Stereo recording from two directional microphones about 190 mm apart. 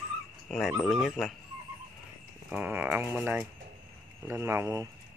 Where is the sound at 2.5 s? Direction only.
10° right (ahead or behind).